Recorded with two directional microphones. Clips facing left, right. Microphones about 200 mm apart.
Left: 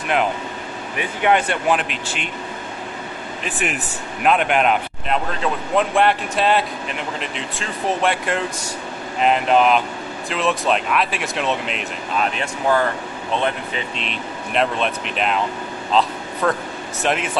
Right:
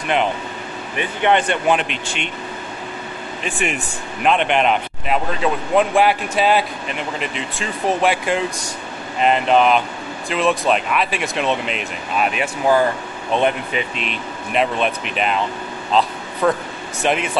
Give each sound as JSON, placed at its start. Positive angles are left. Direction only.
{"t": 0.9, "sound": "speech", "side_deg": 5}
{"t": 3.4, "sound": "speech", "side_deg": 0}
{"t": 13.9, "sound": "speech", "side_deg": -5}
{"t": 15.9, "sound": "air conditioning", "side_deg": 0}
{"t": 17.0, "sound": "speech", "side_deg": 0}